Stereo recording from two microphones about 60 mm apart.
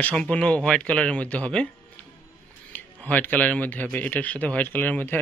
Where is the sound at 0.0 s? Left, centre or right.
Left.